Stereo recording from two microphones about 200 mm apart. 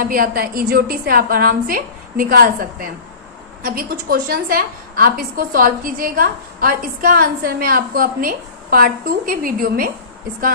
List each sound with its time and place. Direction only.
0.0 s a woman's voice: 45° right (ahead or behind)